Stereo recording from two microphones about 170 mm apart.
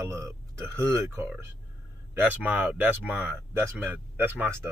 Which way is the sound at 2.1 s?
10° right (ahead or behind).